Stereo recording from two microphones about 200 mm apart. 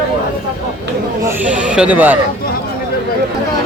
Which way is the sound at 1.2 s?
5° right (ahead or behind).